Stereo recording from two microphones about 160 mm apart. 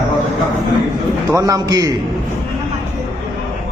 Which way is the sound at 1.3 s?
20° right (ahead or behind).